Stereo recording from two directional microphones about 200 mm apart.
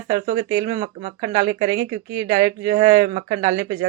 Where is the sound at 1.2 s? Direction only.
20° right (ahead or behind).